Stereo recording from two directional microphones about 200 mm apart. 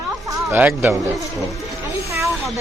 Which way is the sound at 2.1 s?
15° right (ahead or behind).